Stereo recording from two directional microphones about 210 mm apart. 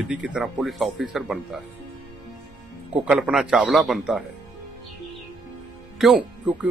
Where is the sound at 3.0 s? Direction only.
5° right (ahead or behind).